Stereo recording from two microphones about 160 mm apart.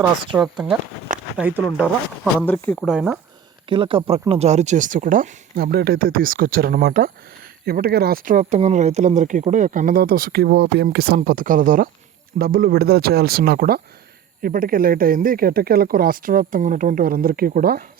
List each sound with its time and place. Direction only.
1.4 s speech: 10° right (ahead or behind)
2.4 s speech: 10° left (ahead or behind)
2.8 s speech: 5° right (ahead or behind)
3.7 s speech: 35° right (ahead or behind); by 5.4 s 50° right (ahead or behind)
5.5 s speech: 70° right (ahead or behind)
14.4 s speech: 60° right (ahead or behind)